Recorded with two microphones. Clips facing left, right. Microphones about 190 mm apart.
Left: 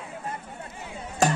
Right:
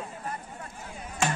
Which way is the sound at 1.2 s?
40° left (ahead or behind).